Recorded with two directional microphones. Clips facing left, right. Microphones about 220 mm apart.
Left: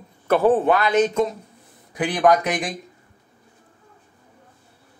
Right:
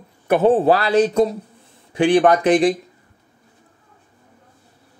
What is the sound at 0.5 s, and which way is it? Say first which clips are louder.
Speech: right 3 dB; 30° right (ahead or behind).